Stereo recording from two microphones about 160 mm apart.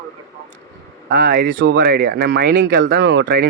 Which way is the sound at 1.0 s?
90° right.